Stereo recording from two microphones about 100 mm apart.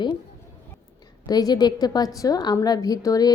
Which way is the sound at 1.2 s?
40° left (ahead or behind).